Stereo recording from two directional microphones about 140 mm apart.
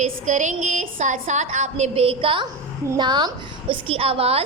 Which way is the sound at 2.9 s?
30° right (ahead or behind).